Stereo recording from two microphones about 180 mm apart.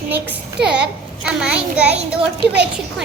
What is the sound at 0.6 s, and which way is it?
A child's voice, 5° right (ahead or behind).